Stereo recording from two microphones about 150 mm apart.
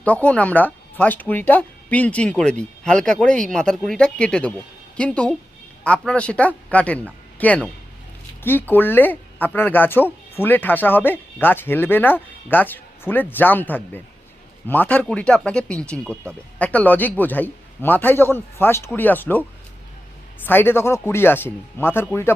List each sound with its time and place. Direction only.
0.0 s a man's voice: 10° left (ahead or behind)